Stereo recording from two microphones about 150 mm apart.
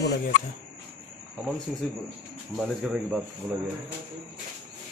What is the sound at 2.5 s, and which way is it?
Speech, 5° right (ahead or behind).